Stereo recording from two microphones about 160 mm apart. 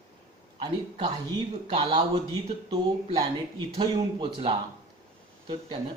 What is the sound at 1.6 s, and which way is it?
Speech, 40° right (ahead or behind).